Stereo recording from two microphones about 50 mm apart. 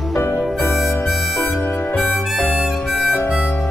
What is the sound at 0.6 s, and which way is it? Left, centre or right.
Harmonica, left.